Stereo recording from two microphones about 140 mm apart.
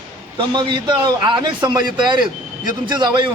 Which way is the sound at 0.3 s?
35° right (ahead or behind).